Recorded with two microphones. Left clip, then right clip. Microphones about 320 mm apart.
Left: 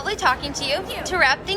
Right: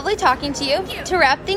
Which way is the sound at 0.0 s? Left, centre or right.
Centre.